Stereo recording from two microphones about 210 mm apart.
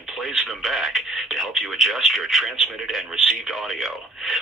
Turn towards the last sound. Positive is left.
turn(degrees=0)  # may be behind; listen again after turning